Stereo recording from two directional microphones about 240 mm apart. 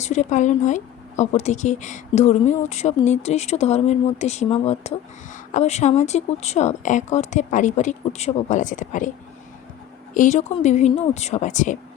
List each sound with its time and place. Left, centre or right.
0.0 s speech: left
10.2 s speech: left